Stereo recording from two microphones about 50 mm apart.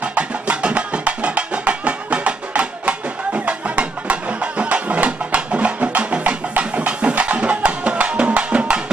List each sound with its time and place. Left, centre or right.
0.2 s music: right